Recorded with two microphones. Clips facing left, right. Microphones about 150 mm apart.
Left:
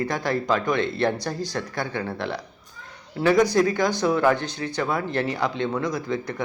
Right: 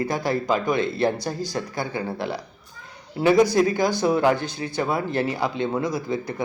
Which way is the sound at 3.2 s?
20° right (ahead or behind).